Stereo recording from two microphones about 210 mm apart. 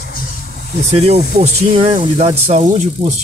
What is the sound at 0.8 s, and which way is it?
Speech, 30° right (ahead or behind).